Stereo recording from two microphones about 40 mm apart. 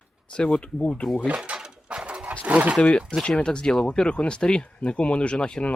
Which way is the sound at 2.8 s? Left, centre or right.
Left.